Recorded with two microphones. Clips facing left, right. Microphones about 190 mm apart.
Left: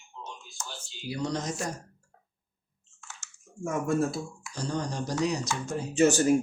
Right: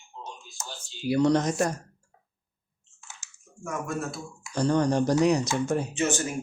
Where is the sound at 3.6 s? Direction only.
30° left (ahead or behind).